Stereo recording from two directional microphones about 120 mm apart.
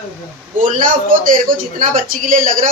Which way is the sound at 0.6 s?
90° right.